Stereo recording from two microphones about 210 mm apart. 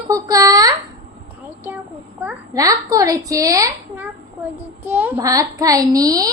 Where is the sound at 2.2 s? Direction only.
10° right (ahead or behind).